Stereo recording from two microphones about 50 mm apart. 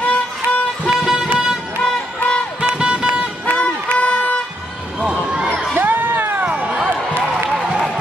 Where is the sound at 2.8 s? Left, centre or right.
Centre.